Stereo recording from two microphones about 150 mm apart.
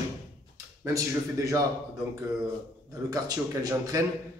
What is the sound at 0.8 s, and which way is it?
Speech, 20° right (ahead or behind).